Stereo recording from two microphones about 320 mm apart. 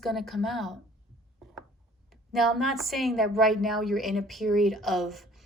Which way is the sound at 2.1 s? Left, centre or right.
Centre.